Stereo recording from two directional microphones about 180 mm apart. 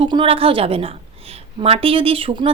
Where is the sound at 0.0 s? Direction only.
30° right (ahead or behind).